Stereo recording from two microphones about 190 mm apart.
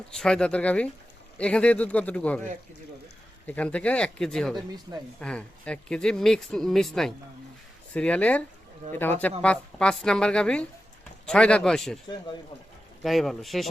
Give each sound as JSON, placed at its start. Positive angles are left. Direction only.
{"t": 0.1, "sound": "a man's voice", "side_deg": 5}
{"t": 4.5, "sound": "speech", "side_deg": -20}
{"t": 5.2, "sound": "a man's voice", "side_deg": 5}
{"t": 13.0, "sound": "speech", "side_deg": 0}